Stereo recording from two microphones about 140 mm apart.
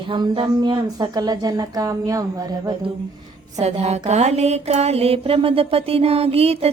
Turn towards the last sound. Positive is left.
turn(degrees=-45)  # may be behind; listen again after turning